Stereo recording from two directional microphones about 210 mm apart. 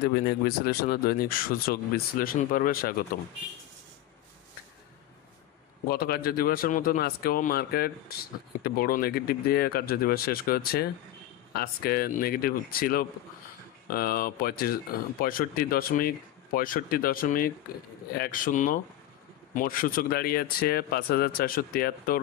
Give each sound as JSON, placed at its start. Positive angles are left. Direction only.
{"t": 0.0, "sound": "speech", "side_deg": 50}
{"t": 5.9, "sound": "speech", "side_deg": 45}